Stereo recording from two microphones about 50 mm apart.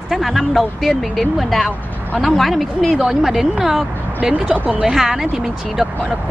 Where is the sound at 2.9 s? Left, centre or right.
Centre.